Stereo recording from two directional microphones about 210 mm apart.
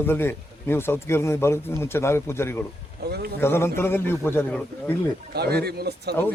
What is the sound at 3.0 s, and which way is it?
Speech, 50° right (ahead or behind).